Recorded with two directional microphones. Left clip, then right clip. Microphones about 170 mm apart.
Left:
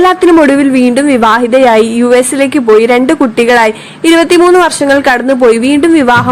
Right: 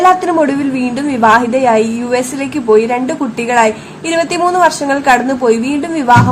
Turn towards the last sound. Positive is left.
turn(degrees=35)  # may be behind; listen again after turning